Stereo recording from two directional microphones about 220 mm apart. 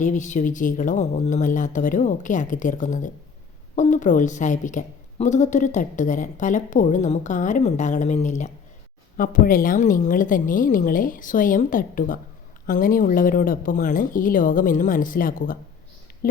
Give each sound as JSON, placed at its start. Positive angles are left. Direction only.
{"t": 0.0, "sound": "a woman's voice", "side_deg": 35}